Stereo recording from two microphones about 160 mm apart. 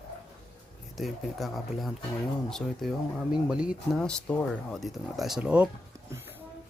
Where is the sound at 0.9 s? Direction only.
Centre (ahead or behind).